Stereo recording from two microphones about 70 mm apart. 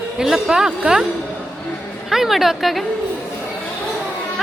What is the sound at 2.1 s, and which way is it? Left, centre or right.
Speech, centre.